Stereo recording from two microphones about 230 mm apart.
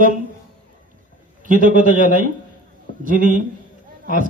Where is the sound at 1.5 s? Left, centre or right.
Right.